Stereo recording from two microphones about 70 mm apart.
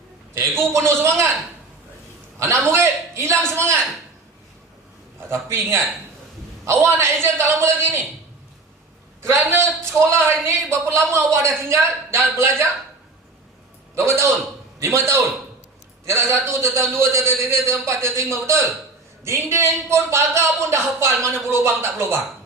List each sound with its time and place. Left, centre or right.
0.3 s speech: right
2.4 s speech: right
5.3 s speech: right
9.2 s speech: right
13.9 s a man's voice: right